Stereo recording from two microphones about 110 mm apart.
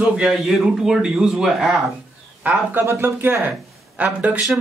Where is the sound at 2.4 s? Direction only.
15° right (ahead or behind).